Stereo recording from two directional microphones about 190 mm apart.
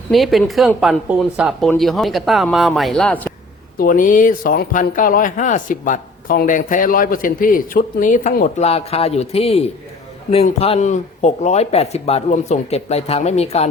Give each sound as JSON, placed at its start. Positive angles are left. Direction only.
{"t": 0.1, "sound": "speech", "side_deg": 0}
{"t": 3.8, "sound": "speech", "side_deg": 45}